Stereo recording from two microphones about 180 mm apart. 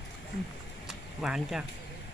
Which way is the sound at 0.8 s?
5° right (ahead or behind).